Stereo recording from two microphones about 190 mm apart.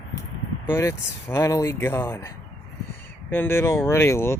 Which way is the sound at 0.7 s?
15° left (ahead or behind).